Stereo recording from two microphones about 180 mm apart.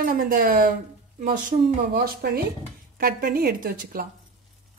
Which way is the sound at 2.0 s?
60° right (ahead or behind).